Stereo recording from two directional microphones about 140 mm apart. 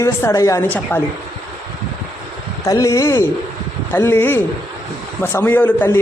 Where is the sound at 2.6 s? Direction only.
25° left (ahead or behind).